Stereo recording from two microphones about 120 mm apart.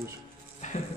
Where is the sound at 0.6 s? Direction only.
90° left.